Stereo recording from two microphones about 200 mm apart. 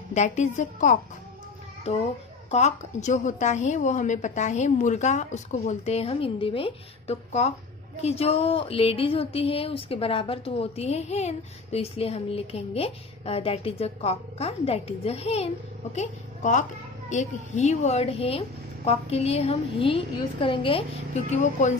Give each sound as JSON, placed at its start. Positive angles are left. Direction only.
{"t": 0.1, "sound": "a woman's voice", "side_deg": 35}